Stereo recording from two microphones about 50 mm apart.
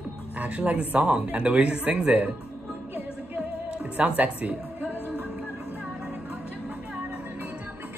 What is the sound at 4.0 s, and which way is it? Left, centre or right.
Speech, right.